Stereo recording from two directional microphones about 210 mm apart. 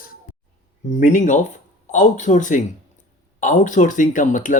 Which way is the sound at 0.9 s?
35° left (ahead or behind).